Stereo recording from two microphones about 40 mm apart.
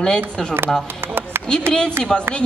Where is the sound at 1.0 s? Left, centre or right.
Right.